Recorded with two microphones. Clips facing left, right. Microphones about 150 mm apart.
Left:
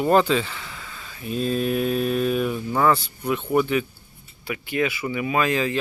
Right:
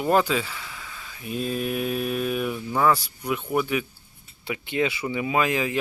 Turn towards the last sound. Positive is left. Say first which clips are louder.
# left 1 dB
turn(degrees=-15)  # may be behind; listen again after turning